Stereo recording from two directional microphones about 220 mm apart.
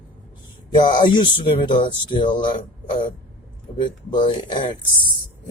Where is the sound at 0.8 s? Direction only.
20° left (ahead or behind).